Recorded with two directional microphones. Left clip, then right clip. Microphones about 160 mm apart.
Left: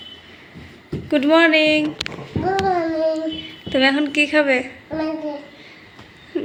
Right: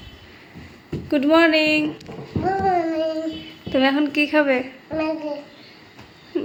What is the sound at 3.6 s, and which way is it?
A woman's voice, 15° right (ahead or behind).